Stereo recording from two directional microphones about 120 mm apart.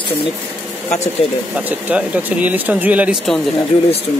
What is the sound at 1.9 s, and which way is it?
Speech, 10° right (ahead or behind).